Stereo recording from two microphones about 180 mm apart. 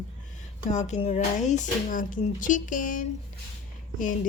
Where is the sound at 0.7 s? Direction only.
40° left (ahead or behind).